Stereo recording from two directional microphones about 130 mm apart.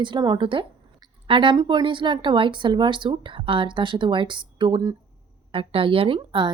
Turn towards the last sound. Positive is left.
turn(degrees=-40)  # may be behind; listen again after turning